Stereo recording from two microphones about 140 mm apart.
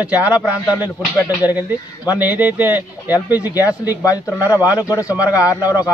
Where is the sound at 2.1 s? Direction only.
10° right (ahead or behind).